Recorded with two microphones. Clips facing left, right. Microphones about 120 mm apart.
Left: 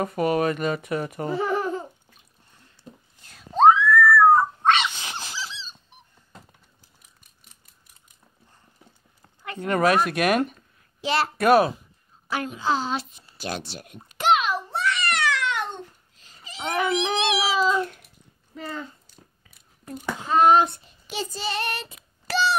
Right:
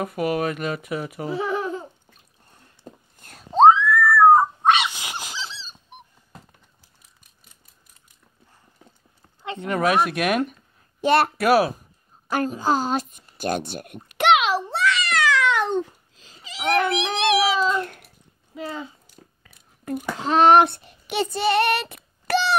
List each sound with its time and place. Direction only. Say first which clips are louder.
0.0 s speech: left 1 dB; centre (ahead or behind)
2.8 s whispering: right 3 dB; 50° right (ahead or behind)
3.5 s dog: right 2 dB; 25° right (ahead or behind)
5.5 s dog: even; 40° right (ahead or behind)
9.6 s speech: even; centre (ahead or behind)
11.0 s a woman's voice: right 6 dB; 55° right (ahead or behind)
11.3 s speech: left 1 dB; 5° right (ahead or behind)
12.3 s a sound: right 3 dB; 45° right (ahead or behind); by 16.7 s 90° right
17.4 s cat: right 1 dB; 5° left (ahead or behind)
18.5 s a sound: right 2 dB; 10° right (ahead or behind)
19.8 s child singing: right 5 dB; 65° right (ahead or behind)